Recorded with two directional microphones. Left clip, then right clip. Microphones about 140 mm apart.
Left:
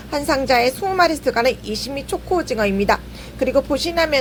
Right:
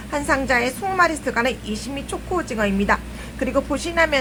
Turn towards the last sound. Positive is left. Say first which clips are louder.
# left 1 dB
turn(degrees=20)  # may be behind; listen again after turning